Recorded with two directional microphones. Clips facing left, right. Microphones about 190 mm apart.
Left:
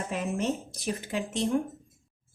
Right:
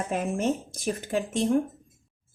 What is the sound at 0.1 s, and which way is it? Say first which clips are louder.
Speech: right 3 dB; 50° right (ahead or behind).